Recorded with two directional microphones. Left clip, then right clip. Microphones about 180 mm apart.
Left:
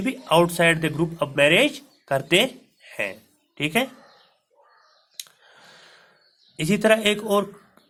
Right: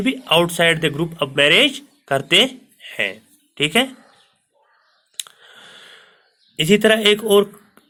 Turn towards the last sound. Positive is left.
turn(degrees=-25)  # may be behind; listen again after turning